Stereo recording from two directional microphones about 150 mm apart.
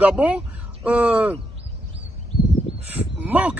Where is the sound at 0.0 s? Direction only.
10° right (ahead or behind).